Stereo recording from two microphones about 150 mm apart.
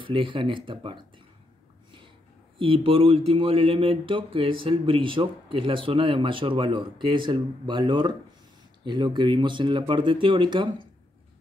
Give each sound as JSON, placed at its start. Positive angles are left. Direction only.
{"t": 0.0, "sound": "speech", "side_deg": -35}
{"t": 2.6, "sound": "speech", "side_deg": -35}